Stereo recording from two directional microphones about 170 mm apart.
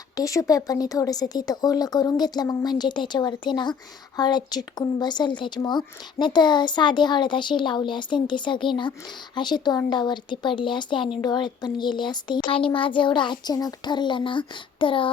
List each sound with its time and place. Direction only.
0.2 s speech: 20° left (ahead or behind)